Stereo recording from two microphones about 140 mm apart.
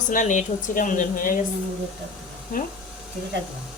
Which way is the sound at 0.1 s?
60° left (ahead or behind).